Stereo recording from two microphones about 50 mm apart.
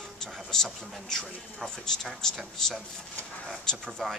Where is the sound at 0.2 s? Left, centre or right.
Centre.